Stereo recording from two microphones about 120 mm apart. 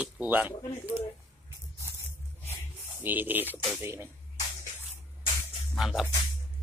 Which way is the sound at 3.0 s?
15° right (ahead or behind).